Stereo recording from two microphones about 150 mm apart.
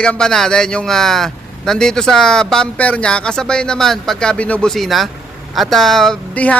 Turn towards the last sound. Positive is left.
turn(degrees=10)  # may be behind; listen again after turning